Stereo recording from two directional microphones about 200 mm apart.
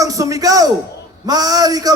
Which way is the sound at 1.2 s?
20° right (ahead or behind).